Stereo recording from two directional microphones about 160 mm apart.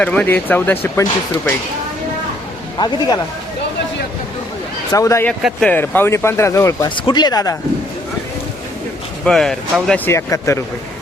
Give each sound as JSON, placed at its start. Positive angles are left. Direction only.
{"t": 0.0, "sound": "speech", "side_deg": 10}
{"t": 2.7, "sound": "speech", "side_deg": 25}
{"t": 4.9, "sound": "speech", "side_deg": 20}
{"t": 5.4, "sound": "speech", "side_deg": -5}
{"t": 5.6, "sound": "speech", "side_deg": 10}
{"t": 9.2, "sound": "speech", "side_deg": 5}
{"t": 10.1, "sound": "speech", "side_deg": 15}